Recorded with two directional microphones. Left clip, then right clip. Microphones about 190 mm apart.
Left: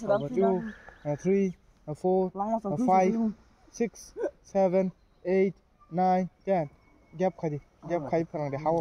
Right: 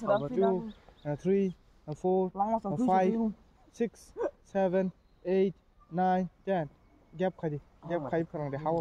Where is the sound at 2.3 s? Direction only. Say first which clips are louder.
Even; 30° right (ahead or behind).